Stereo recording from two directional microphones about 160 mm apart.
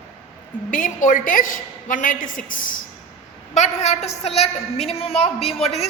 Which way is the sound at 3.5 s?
45° left (ahead or behind).